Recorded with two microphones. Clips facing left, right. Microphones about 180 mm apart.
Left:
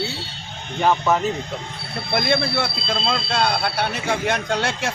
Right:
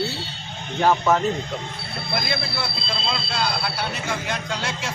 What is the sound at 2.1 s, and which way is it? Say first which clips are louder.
Speech: left 7 dB; 55° left (ahead or behind).